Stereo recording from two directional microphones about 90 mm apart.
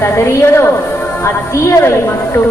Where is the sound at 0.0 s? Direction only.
30° left (ahead or behind).